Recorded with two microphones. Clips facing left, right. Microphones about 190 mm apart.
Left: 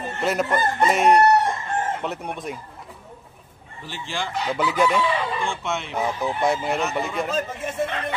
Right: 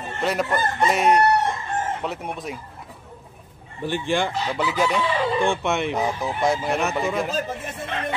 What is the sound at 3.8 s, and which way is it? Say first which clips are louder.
Speech: right 8 dB; 55° right (ahead or behind).